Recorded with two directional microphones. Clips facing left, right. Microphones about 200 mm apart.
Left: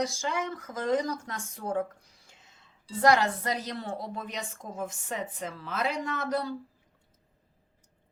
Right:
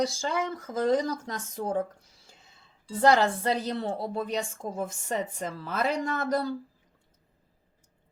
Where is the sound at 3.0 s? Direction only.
30° right (ahead or behind).